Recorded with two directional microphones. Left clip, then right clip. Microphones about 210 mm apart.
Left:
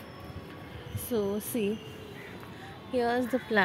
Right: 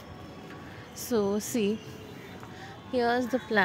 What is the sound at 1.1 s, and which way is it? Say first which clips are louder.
Speech: right 3 dB; 15° right (ahead or behind).